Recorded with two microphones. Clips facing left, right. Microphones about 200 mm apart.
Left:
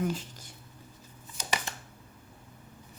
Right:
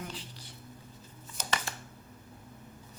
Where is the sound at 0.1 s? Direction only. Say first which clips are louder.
Left 9 dB; 45° left (ahead or behind).